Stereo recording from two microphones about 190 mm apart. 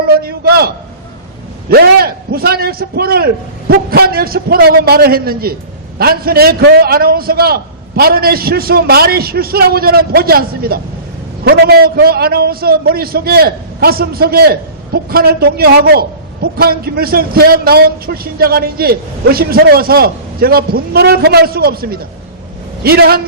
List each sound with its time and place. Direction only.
0.0 s a man's voice: 55° right (ahead or behind)
1.7 s a man's voice: 55° right (ahead or behind)